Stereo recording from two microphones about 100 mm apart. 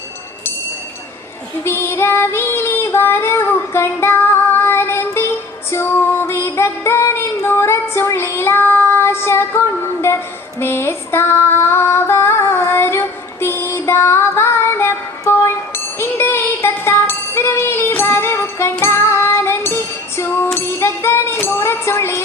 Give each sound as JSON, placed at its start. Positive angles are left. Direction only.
{"t": 1.6, "sound": "female singing", "side_deg": 25}
{"t": 13.4, "sound": "music", "side_deg": 25}